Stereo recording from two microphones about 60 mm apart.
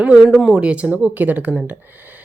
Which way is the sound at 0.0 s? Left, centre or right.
Centre.